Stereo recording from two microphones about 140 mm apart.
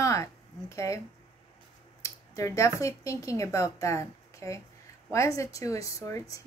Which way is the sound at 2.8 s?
25° left (ahead or behind).